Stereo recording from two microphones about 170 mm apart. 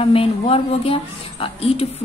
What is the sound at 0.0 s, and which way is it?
A woman's voice, 35° left (ahead or behind).